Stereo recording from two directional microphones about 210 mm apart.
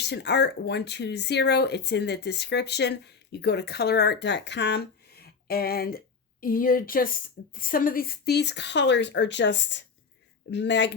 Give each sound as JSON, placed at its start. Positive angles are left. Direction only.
{"t": 0.0, "sound": "speech", "side_deg": 55}